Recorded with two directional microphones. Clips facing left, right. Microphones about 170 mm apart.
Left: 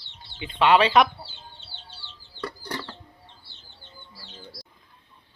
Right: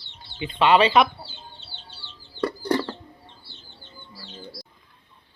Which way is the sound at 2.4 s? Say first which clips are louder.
Right 10 dB; 40° right (ahead or behind).